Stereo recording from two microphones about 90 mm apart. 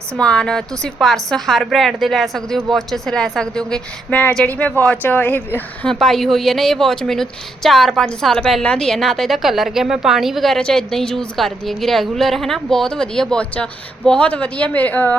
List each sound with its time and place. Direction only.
0.2 s a woman's voice: 10° left (ahead or behind)
5.9 s a woman's voice: 5° left (ahead or behind)